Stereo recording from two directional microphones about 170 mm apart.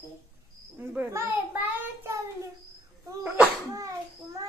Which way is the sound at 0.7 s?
15° right (ahead or behind).